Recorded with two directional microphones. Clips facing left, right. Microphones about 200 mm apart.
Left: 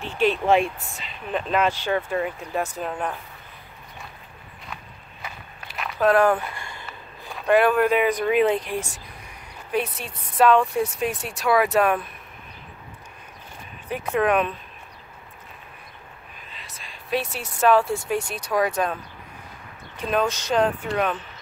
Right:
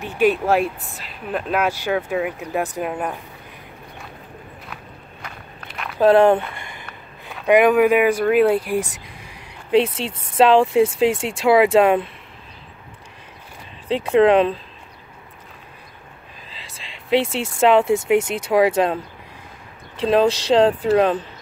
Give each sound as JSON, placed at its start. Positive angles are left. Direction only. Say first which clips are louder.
{"t": 0.0, "sound": "speech", "louder": "right 4 dB", "side_deg": -10}
{"t": 5.9, "sound": "speech", "louder": "right 5 dB", "side_deg": -30}
{"t": 9.7, "sound": "speech", "louder": "right 9 dB", "side_deg": -25}
{"t": 13.8, "sound": "speech", "louder": "right 8 dB", "side_deg": -25}
{"t": 17.1, "sound": "speech", "louder": "right 8 dB", "side_deg": -25}
{"t": 20.1, "sound": "speech", "louder": "right 7 dB", "side_deg": -30}